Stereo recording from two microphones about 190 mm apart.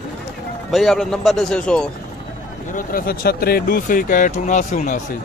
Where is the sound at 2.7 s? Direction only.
45° left (ahead or behind).